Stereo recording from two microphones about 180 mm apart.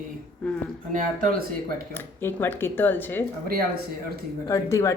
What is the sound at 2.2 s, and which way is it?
Speech, 10° left (ahead or behind).